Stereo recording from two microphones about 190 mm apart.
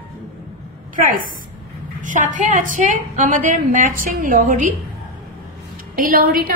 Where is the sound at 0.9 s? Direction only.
45° right (ahead or behind).